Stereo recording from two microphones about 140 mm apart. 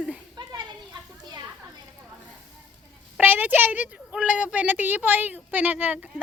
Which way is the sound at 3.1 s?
10° right (ahead or behind).